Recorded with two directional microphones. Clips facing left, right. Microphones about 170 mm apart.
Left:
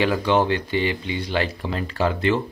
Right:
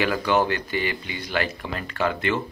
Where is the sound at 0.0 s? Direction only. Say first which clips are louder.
Left 2 dB; 25° left (ahead or behind).